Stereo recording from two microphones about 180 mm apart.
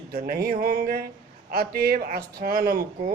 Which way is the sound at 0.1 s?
55° right (ahead or behind).